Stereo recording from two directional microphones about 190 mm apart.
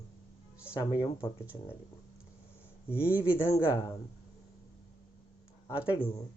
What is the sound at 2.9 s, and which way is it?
Speech, 10° left (ahead or behind).